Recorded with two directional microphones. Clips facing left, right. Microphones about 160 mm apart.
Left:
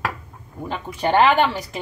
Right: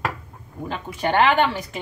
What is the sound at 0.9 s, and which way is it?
Speech, 35° left (ahead or behind).